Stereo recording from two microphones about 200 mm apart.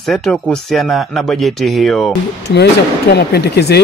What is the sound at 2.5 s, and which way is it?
Speech, 55° left (ahead or behind).